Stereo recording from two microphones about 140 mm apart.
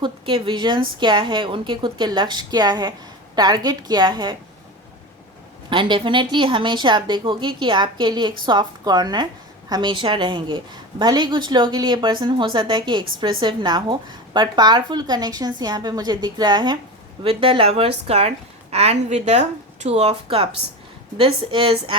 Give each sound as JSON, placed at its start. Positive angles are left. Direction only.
{"t": 0.0, "sound": "a woman's voice", "side_deg": -35}
{"t": 5.7, "sound": "a woman's voice", "side_deg": -35}